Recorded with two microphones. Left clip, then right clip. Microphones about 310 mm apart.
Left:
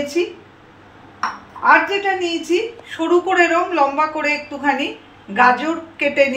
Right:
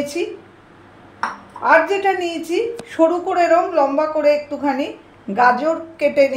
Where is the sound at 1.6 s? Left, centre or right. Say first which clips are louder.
Even; right.